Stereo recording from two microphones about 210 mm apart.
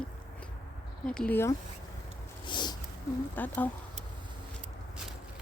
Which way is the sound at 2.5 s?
20° left (ahead or behind).